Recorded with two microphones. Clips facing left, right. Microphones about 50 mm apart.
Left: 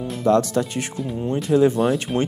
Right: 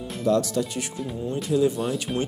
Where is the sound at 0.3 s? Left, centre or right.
Left.